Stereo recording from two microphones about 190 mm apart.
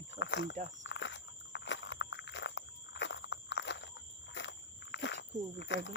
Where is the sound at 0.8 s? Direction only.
75° left (ahead or behind).